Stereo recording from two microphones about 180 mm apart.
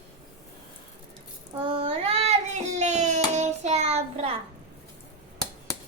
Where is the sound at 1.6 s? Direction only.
30° right (ahead or behind).